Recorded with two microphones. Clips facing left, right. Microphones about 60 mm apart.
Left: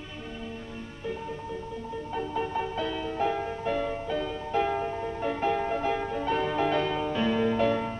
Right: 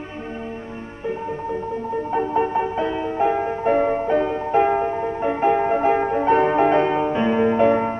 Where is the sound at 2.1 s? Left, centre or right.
Right.